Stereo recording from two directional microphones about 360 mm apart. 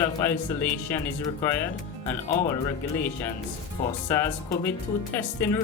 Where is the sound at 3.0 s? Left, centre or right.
Centre.